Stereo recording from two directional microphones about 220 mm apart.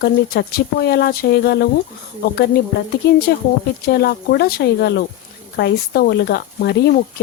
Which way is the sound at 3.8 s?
45° left (ahead or behind).